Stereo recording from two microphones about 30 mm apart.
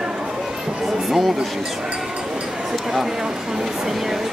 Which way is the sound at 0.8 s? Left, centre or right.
Centre.